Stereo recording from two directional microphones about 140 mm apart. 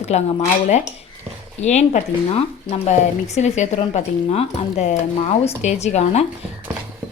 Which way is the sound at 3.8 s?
40° left (ahead or behind).